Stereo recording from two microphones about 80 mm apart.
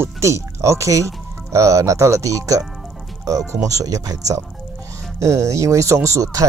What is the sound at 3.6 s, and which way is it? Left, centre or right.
Speech, right.